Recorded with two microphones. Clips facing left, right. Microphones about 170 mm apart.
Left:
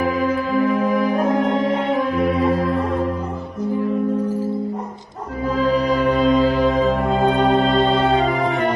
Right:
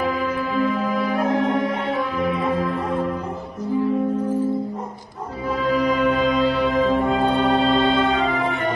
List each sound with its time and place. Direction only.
5.6 s music: 40° left (ahead or behind)
7.5 s music: 40° left (ahead or behind)